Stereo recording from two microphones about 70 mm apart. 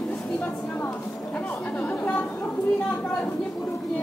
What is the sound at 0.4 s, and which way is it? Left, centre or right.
Chatter, left.